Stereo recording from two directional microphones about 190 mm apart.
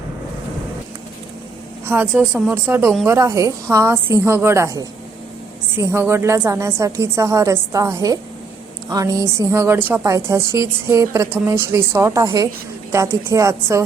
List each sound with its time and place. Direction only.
1.9 s a woman's voice: 10° right (ahead or behind)